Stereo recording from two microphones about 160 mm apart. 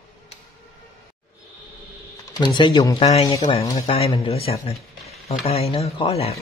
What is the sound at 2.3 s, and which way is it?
Speech, 30° left (ahead or behind).